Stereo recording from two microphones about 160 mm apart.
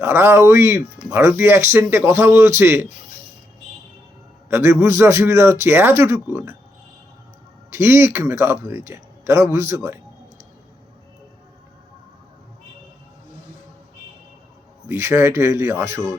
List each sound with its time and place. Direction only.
0.0 s speech: 15° right (ahead or behind)
4.4 s speech: 15° right (ahead or behind)
7.7 s speech: 15° right (ahead or behind)
14.8 s speech: 15° right (ahead or behind)